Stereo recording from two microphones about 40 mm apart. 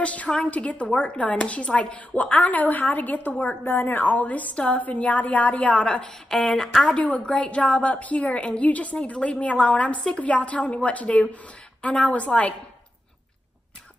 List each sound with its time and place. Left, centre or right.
0.0 s speech: left
3.6 s speech: left
6.3 s speech: centre
6.8 s a woman's voice: left